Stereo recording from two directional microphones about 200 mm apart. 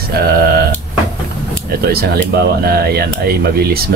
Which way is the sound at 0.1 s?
50° right (ahead or behind).